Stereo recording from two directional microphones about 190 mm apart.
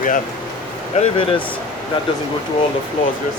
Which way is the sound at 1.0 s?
30° left (ahead or behind).